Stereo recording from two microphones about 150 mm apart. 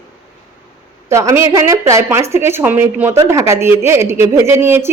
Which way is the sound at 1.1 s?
20° right (ahead or behind).